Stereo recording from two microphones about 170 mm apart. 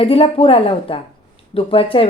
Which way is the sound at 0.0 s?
35° left (ahead or behind).